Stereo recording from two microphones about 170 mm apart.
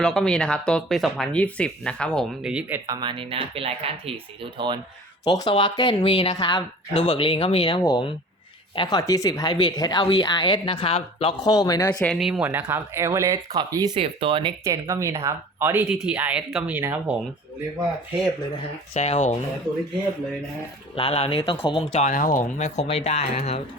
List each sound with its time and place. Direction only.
0.0 s speech: 5° left (ahead or behind); by 4.8 s 25° right (ahead or behind)
5.4 s speech: 25° left (ahead or behind)
11.9 s speech: centre (ahead or behind); by 14.5 s 30° right (ahead or behind)
14.6 s speech: 15° right (ahead or behind)
15.9 s speech: 5° right (ahead or behind)
18.9 s speech: 40° left (ahead or behind)
20.9 s speech: 35° left (ahead or behind)
22.0 s speech: 50° left (ahead or behind)